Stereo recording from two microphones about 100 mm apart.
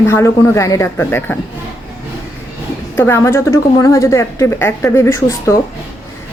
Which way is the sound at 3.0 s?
25° left (ahead or behind).